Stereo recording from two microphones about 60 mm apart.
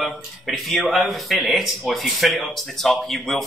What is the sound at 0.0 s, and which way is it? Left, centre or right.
Speech, centre.